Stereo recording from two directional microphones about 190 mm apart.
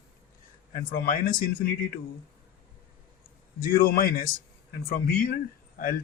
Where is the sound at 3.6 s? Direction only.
50° left (ahead or behind).